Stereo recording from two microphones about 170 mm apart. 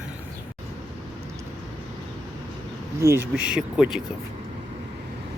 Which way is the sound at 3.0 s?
15° right (ahead or behind).